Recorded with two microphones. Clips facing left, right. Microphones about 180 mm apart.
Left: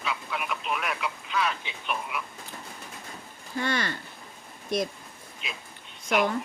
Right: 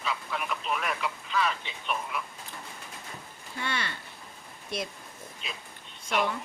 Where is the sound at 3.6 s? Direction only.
45° left (ahead or behind).